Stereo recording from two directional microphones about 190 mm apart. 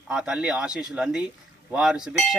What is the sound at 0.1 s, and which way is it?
A man's voice, 5° right (ahead or behind).